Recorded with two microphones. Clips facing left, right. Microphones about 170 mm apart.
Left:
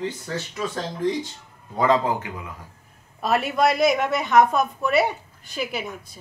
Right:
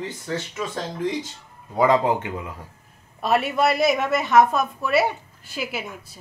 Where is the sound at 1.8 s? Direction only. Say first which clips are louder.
Right 2 dB; 15° right (ahead or behind).